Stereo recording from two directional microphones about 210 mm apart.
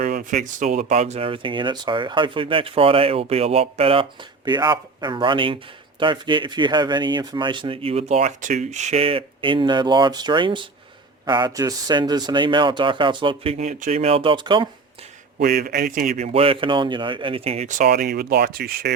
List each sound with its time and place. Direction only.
0.0 s speech: 40° right (ahead or behind); by 14.7 s 25° right (ahead or behind)
15.4 s speech: 45° right (ahead or behind)